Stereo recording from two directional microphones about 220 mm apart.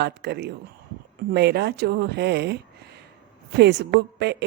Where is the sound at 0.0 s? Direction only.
50° right (ahead or behind).